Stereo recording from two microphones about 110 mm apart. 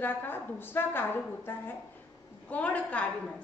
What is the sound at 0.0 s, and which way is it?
A woman's voice, 20° left (ahead or behind).